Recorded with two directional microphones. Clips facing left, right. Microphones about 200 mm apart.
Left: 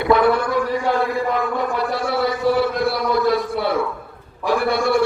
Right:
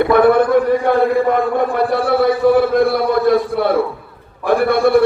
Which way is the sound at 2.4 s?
55° right (ahead or behind).